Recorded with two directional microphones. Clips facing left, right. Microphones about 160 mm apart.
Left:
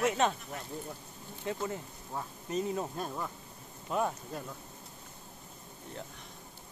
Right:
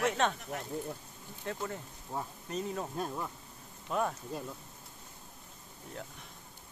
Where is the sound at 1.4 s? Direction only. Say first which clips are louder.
Left 3 dB; 5° left (ahead or behind).